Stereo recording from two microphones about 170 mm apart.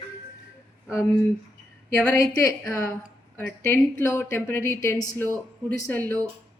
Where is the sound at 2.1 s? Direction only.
20° left (ahead or behind).